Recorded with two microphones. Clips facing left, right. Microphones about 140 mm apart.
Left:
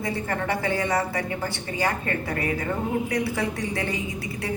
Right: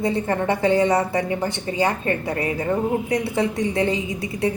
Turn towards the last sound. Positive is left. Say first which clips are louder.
# right 7 dB
turn(degrees=-20)  # may be behind; listen again after turning